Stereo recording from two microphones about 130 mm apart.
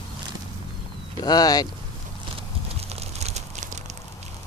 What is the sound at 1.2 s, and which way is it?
Speech, 30° left (ahead or behind).